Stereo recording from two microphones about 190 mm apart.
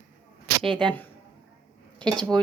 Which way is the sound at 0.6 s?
5° left (ahead or behind).